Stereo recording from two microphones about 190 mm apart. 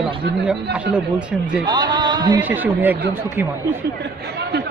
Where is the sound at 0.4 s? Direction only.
5° right (ahead or behind).